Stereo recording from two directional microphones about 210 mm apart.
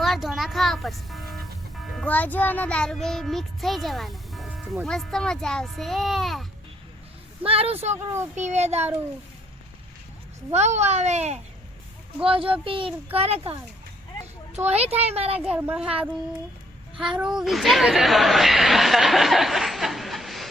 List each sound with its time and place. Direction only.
0.0 s speech: centre (ahead or behind)
2.0 s child singing: 5° left (ahead or behind)
7.4 s a child's voice: 25° right (ahead or behind)
10.5 s a child's voice: 30° right (ahead or behind)
14.7 s a child's voice: 30° right (ahead or behind)
15.4 s a woman's voice: 5° right (ahead or behind)
17.0 s speech: 5° right (ahead or behind)